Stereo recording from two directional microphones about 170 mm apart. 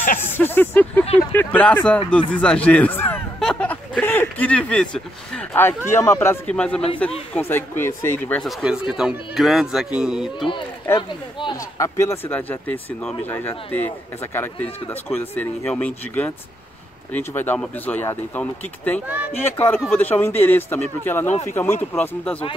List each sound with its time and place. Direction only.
0.2 s speech: 10° left (ahead or behind)
8.4 s speech: centre (ahead or behind)
11.0 s speech: 30° left (ahead or behind); by 22.4 s 10° left (ahead or behind)